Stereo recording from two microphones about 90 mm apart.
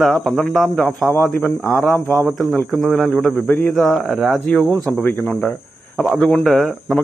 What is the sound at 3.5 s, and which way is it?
Speech, 20° left (ahead or behind).